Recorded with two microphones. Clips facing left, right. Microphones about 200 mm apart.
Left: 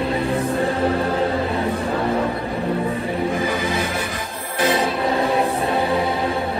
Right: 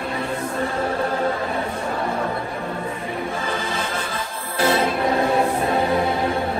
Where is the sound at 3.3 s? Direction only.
15° left (ahead or behind).